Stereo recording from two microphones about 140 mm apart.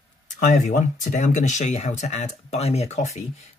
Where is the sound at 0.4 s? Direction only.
65° left (ahead or behind).